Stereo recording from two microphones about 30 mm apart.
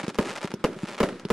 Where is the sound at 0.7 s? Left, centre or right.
Centre.